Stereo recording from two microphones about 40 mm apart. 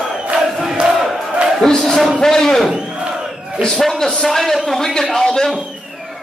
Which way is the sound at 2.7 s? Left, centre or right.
Right.